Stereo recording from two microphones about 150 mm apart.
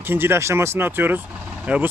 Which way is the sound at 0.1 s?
15° right (ahead or behind).